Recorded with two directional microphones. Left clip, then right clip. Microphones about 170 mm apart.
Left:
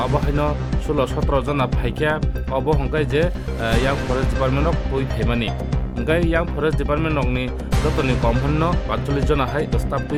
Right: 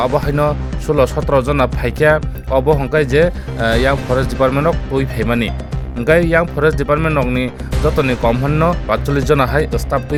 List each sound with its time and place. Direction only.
0.0 s speech: 25° right (ahead or behind)